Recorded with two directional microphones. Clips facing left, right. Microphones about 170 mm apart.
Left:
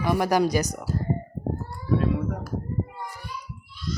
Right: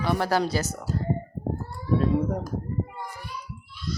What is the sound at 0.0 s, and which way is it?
Speech, 15° left (ahead or behind).